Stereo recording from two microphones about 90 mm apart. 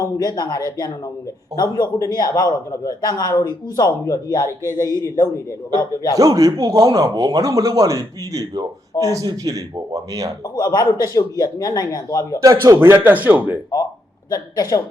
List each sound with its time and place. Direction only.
0.0 s a man's voice: 40° left (ahead or behind)
5.8 s speech: 40° left (ahead or behind)
6.1 s speech: 40° right (ahead or behind)
10.5 s a man's voice: 50° left (ahead or behind)
12.4 s speech: 40° right (ahead or behind)
12.7 s speech: 25° right (ahead or behind)
14.3 s a man's voice: 45° left (ahead or behind)